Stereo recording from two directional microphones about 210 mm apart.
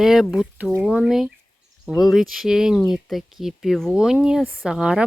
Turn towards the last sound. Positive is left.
turn(degrees=-5)  # may be behind; listen again after turning